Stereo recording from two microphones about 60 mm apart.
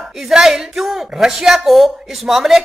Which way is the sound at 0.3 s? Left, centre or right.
Centre.